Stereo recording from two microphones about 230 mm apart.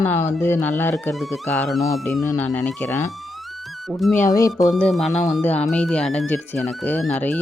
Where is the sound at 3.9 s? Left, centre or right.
Centre.